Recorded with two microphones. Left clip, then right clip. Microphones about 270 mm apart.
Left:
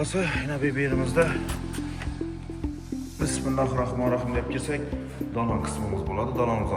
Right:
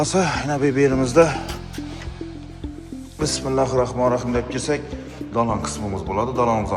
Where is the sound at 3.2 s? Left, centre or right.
Centre.